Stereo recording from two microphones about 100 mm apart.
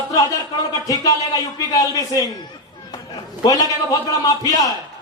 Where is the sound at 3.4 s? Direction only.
40° left (ahead or behind).